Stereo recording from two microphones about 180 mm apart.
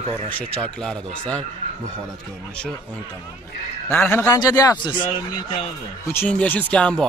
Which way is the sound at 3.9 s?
10° left (ahead or behind).